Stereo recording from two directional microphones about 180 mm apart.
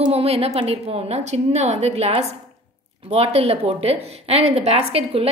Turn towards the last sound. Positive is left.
turn(degrees=-35)  # may be behind; listen again after turning